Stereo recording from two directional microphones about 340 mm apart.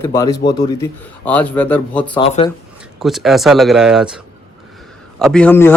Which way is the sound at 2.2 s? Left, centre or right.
Centre.